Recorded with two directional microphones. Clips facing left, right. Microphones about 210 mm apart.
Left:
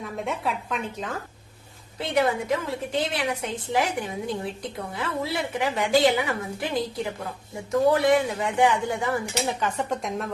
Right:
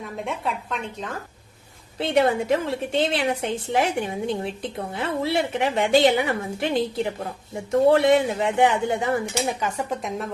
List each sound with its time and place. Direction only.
0.0 s a woman's voice: centre (ahead or behind)
2.0 s a woman's voice: 30° right (ahead or behind)
9.6 s a woman's voice: 10° right (ahead or behind)